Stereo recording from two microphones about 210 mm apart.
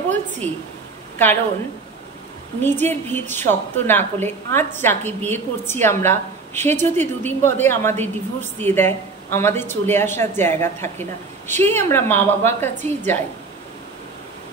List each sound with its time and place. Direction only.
1.1 s a woman's voice: 10° left (ahead or behind)
2.6 s a woman's voice: 10° left (ahead or behind)